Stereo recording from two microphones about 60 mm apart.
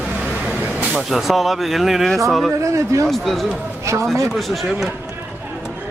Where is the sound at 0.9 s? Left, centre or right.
Centre.